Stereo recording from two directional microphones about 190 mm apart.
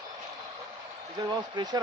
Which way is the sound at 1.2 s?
20° right (ahead or behind).